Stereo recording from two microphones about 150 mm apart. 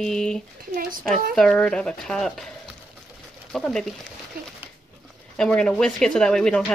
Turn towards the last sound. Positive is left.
turn(degrees=5)  # may be behind; listen again after turning